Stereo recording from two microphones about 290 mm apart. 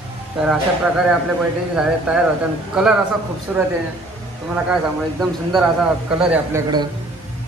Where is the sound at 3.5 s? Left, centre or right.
Centre.